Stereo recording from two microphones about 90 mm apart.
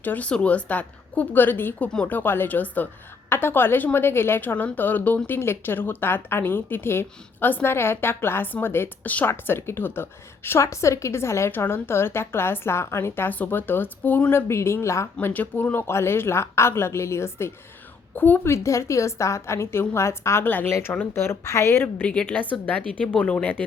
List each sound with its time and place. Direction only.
0.0 s a woman's voice: 20° left (ahead or behind)
15.3 s a woman's voice: 20° left (ahead or behind)
22.0 s a woman's voice: 10° left (ahead or behind)